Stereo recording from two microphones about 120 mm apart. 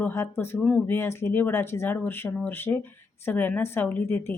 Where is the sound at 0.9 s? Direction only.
20° left (ahead or behind).